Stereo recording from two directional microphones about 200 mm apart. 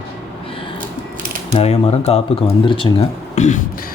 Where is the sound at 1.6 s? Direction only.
30° left (ahead or behind).